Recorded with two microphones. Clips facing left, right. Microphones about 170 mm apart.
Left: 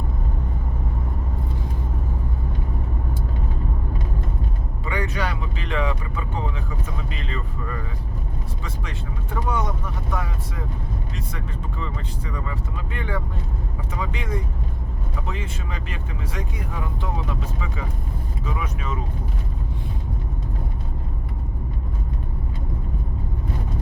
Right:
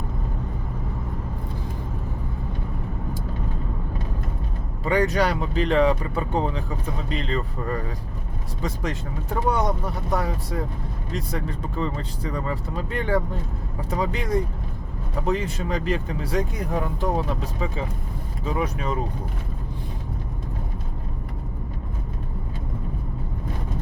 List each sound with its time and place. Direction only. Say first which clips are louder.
4.9 s speech: right 6 dB; 35° right (ahead or behind)